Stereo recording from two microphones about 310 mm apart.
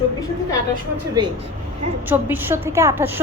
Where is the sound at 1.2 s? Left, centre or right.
Centre.